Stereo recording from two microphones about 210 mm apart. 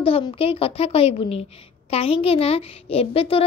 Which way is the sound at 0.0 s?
25° left (ahead or behind).